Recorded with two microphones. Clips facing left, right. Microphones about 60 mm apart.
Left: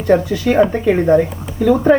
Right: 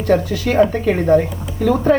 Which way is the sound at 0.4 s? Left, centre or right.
Centre.